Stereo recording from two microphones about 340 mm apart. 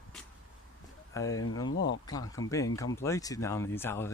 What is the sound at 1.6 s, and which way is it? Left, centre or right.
Speech, left.